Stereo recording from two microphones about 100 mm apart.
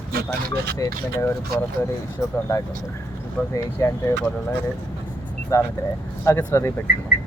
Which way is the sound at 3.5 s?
30° left (ahead or behind).